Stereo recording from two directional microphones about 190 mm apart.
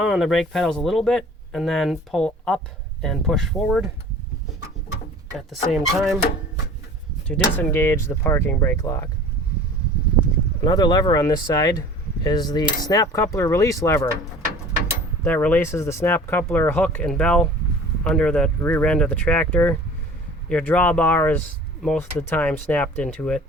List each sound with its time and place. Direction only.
0.1 s speech: centre (ahead or behind)
5.3 s speech: centre (ahead or behind)
7.3 s speech: 5° left (ahead or behind)
10.6 s speech: 20° left (ahead or behind)
15.2 s speech: 10° left (ahead or behind)